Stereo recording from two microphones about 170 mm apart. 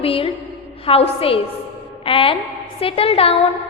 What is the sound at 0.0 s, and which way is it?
A woman's voice, 35° left (ahead or behind).